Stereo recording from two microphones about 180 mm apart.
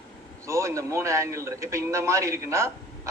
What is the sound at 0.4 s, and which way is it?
A man's voice, 15° right (ahead or behind).